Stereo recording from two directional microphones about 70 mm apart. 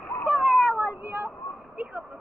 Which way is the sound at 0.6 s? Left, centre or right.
Right.